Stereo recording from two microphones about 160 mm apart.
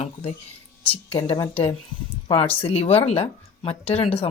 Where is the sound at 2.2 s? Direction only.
30° left (ahead or behind).